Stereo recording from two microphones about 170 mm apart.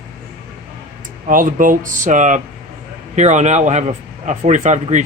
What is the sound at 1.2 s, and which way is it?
Speech, 50° right (ahead or behind).